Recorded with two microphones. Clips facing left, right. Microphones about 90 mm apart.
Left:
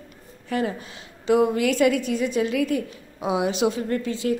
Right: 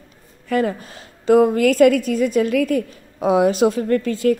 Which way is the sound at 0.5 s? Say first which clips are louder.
Right 6 dB; 50° right (ahead or behind).